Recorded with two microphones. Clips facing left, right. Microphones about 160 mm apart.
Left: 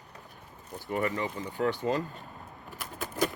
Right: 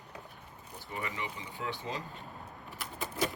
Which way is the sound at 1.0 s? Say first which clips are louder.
Left 7 dB; 45° left (ahead or behind).